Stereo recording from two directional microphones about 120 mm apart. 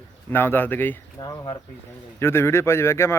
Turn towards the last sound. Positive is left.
turn(degrees=20)  # may be behind; listen again after turning